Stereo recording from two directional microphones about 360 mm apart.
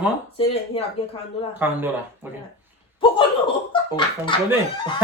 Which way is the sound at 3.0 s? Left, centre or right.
Centre.